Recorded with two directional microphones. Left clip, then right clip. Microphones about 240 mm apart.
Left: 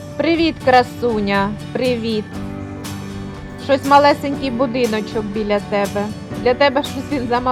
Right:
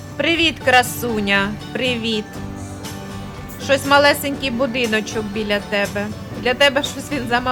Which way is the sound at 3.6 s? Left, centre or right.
Centre.